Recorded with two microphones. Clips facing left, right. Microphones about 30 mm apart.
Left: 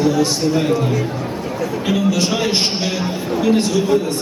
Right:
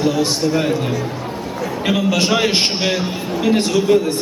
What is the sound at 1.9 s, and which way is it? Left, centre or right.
A man's voice, right.